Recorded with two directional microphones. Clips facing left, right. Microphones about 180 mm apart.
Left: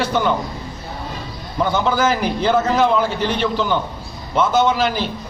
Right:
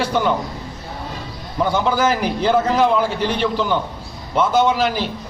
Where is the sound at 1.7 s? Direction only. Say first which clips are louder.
Even; 10° right (ahead or behind).